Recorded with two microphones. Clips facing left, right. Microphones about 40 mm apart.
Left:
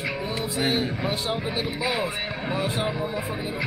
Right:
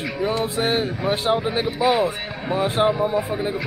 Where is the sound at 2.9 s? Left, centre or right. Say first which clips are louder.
Right 8 dB; centre.